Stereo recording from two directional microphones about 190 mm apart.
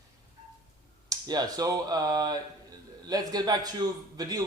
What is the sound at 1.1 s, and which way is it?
A man's voice, 20° right (ahead or behind).